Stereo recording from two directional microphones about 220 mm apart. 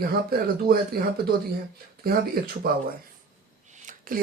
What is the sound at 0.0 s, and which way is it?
Speech, 40° right (ahead or behind).